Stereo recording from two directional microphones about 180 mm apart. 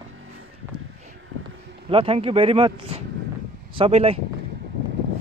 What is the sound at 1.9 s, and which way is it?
Speech, 30° right (ahead or behind).